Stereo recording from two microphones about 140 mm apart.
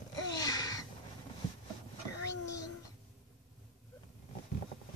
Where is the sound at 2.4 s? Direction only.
25° left (ahead or behind).